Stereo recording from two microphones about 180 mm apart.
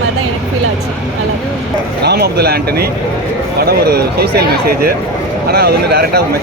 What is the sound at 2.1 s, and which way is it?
Speech, 60° right (ahead or behind).